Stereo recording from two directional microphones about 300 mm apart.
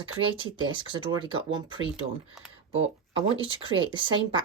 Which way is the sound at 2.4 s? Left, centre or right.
Centre.